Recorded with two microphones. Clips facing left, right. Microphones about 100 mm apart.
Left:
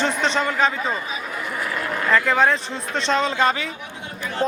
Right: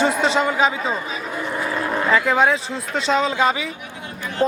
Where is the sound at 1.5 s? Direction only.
25° right (ahead or behind).